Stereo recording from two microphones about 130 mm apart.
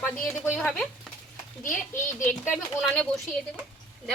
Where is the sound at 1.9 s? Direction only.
15° left (ahead or behind).